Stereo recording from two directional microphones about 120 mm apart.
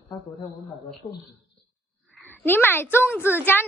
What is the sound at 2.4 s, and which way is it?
Speech, 15° left (ahead or behind).